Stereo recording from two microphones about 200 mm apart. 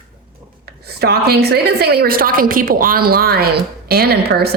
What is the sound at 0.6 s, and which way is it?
A woman's voice, 55° right (ahead or behind).